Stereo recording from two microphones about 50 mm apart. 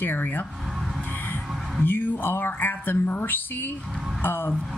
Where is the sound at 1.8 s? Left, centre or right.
Left.